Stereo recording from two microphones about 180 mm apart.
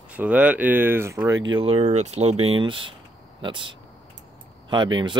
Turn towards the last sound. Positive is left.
turn(degrees=-25)  # may be behind; listen again after turning